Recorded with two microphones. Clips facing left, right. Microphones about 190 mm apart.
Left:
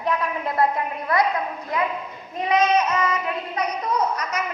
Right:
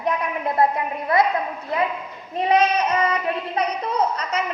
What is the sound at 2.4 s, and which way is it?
Child singing, 30° right (ahead or behind).